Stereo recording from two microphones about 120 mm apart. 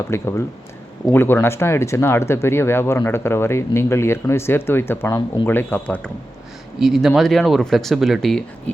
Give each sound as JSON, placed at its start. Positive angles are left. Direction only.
{"t": 0.1, "sound": "speech", "side_deg": 20}
{"t": 6.7, "sound": "speech", "side_deg": 0}